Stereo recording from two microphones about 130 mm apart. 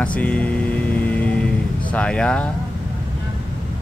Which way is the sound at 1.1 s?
10° left (ahead or behind).